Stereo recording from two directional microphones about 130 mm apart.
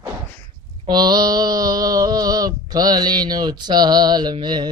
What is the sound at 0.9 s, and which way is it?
Mantra, 35° right (ahead or behind).